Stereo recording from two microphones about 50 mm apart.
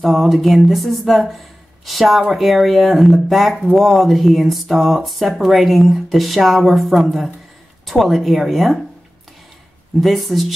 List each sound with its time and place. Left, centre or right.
0.0 s speech: centre
9.9 s speech: centre